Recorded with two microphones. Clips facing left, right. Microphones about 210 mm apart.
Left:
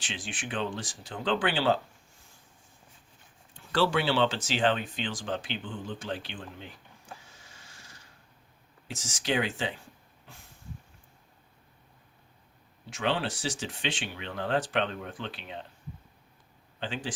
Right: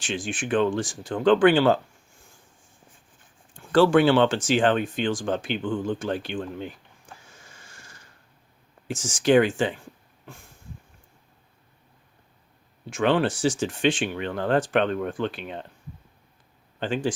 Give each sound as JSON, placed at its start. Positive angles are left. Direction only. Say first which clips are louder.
{"t": 0.0, "sound": "speech", "louder": "right 9 dB", "side_deg": -45}
{"t": 3.5, "sound": "speech", "louder": "right 9 dB", "side_deg": -45}
{"t": 8.9, "sound": "speech", "louder": "right 12 dB", "side_deg": -50}
{"t": 12.9, "sound": "speech", "louder": "right 8 dB", "side_deg": -50}
{"t": 16.8, "sound": "speech", "louder": "right 9 dB", "side_deg": -45}